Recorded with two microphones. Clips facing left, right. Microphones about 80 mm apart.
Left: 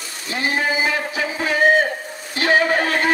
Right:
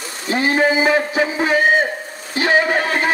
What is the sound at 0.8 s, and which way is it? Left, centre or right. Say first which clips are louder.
Speech: right 6 dB; right.